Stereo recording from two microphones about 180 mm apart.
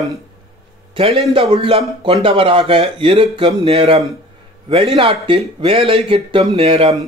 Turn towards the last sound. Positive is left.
turn(degrees=-35)  # may be behind; listen again after turning